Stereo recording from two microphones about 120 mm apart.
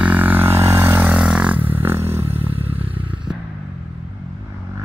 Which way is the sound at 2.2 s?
55° right (ahead or behind).